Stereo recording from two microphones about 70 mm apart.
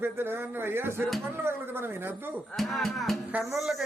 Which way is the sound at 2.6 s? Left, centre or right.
Centre.